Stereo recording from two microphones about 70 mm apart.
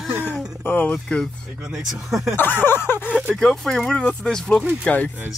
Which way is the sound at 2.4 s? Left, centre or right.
Left.